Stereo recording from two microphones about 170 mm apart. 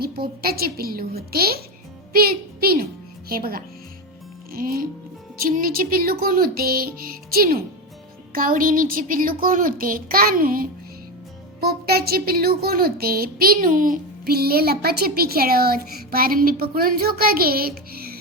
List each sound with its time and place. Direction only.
0.0 s a woman's voice: 65° right (ahead or behind)